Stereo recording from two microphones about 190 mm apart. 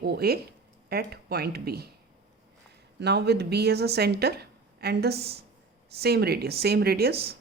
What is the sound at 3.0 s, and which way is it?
Speech, 60° right (ahead or behind).